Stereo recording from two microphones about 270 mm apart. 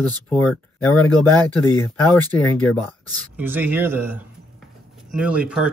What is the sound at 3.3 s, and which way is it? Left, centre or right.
Speech, centre.